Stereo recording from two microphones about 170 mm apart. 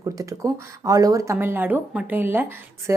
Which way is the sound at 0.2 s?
20° right (ahead or behind).